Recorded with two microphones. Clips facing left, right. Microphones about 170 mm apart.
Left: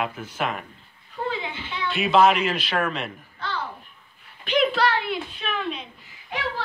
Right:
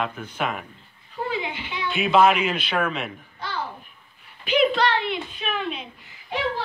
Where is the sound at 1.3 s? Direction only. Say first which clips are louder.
Right 3 dB; 15° right (ahead or behind).